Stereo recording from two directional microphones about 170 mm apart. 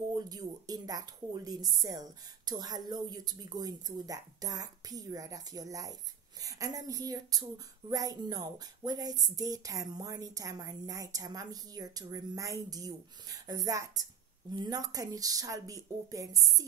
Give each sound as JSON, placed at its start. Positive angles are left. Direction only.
{"t": 0.1, "sound": "speech", "side_deg": -20}